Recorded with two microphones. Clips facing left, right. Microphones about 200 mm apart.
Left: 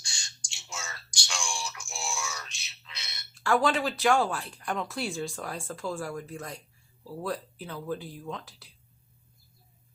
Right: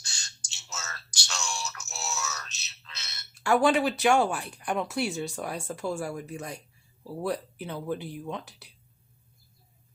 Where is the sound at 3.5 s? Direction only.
10° right (ahead or behind).